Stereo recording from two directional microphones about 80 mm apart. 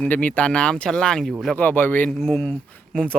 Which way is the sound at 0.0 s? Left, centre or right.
Centre.